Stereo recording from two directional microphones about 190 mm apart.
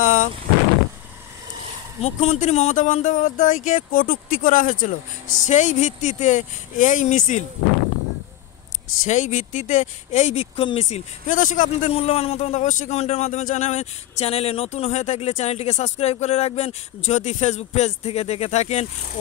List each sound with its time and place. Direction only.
0.0 s vehicle: 45° left (ahead or behind)
2.0 s speech: 35° left (ahead or behind)
9.0 s speech: 40° left (ahead or behind)